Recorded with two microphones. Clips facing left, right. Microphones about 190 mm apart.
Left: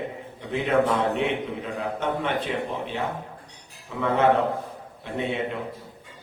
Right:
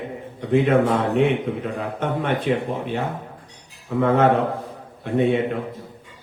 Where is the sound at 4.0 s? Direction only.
50° right (ahead or behind).